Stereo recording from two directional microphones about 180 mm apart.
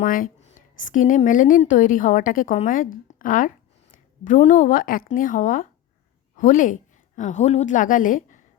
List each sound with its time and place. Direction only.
0.0 s a woman's voice: 50° left (ahead or behind)